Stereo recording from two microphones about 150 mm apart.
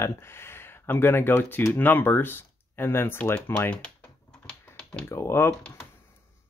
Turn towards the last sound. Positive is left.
turn(degrees=15)  # may be behind; listen again after turning